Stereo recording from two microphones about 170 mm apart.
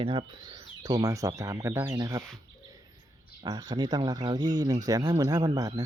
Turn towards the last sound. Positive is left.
turn(degrees=-20)  # may be behind; listen again after turning